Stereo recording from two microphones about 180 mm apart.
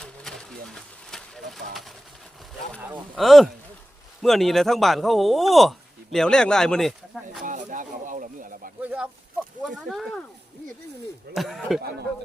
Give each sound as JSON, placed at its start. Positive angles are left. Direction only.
{"t": 0.0, "sound": "pigeon", "side_deg": 5}
{"t": 3.2, "sound": "speech", "side_deg": 0}
{"t": 7.4, "sound": "speech", "side_deg": -45}
{"t": 8.8, "sound": "speech", "side_deg": -5}
{"t": 11.3, "sound": "speech", "side_deg": 0}